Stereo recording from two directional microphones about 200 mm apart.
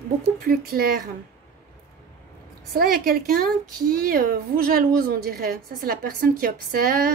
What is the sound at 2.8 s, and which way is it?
A woman's voice, 45° right (ahead or behind).